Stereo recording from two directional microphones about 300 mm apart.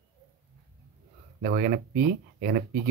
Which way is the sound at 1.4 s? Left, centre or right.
Right.